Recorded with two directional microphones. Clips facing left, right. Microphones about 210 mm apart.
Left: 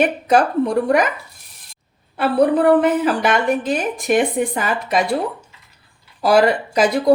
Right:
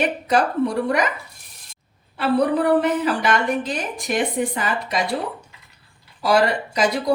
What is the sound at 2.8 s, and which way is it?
Speech, 50° left (ahead or behind).